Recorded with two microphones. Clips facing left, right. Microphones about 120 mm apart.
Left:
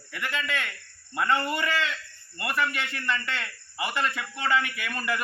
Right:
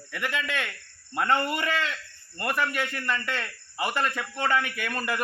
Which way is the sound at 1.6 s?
45° right (ahead or behind).